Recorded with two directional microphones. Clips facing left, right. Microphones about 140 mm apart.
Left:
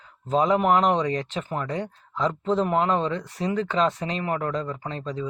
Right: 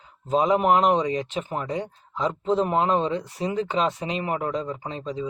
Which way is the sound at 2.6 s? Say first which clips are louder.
Even; 25° right (ahead or behind).